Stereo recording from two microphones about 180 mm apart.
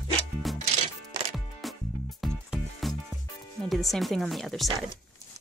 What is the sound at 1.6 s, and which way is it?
Music, centre (ahead or behind).